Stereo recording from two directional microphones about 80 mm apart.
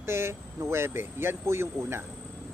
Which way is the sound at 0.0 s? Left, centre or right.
Right.